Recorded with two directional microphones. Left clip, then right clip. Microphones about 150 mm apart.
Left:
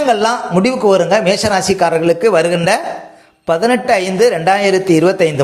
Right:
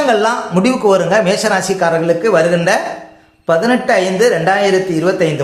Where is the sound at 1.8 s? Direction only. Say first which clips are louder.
Left 2 dB; 45° left (ahead or behind).